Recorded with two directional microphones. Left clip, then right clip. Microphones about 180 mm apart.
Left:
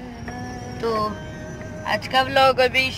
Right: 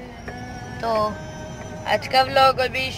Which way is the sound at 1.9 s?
5° left (ahead or behind).